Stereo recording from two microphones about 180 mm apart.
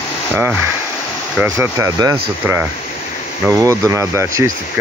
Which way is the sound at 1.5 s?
15° right (ahead or behind).